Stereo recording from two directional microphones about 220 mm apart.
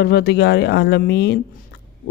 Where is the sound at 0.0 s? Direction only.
50° left (ahead or behind).